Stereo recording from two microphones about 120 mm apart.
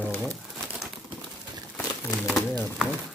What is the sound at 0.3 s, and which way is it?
Crumpling, 5° left (ahead or behind).